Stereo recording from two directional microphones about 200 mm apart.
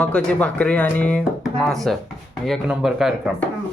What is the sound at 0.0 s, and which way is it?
Speech, 5° left (ahead or behind).